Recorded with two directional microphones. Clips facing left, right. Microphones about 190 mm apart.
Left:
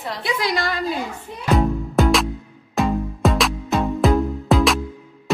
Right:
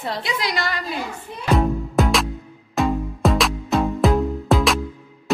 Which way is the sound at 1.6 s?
Centre (ahead or behind).